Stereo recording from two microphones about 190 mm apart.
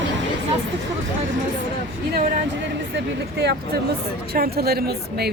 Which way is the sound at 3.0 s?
60° right (ahead or behind).